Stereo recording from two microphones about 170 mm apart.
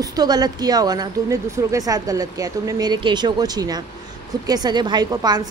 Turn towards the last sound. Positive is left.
turn(degrees=-25)  # may be behind; listen again after turning